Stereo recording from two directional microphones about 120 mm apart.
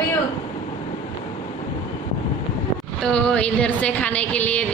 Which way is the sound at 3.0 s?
10° left (ahead or behind).